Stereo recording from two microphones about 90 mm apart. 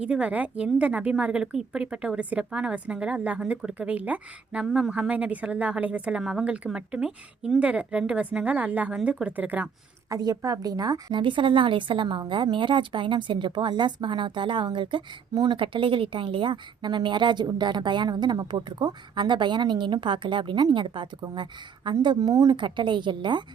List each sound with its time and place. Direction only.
0.0 s a woman's voice: 15° right (ahead or behind)
4.6 s a woman's voice: 5° right (ahead or behind)
10.1 s a woman's voice: 45° right (ahead or behind)
11.1 s a woman's voice: 65° right (ahead or behind)
22.2 s a woman's voice: 45° right (ahead or behind)
22.6 s speech: 60° right (ahead or behind)